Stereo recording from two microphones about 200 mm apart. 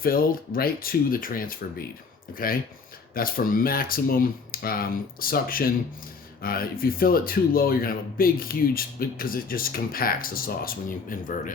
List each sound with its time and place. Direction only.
0.0 s speech: 45° left (ahead or behind)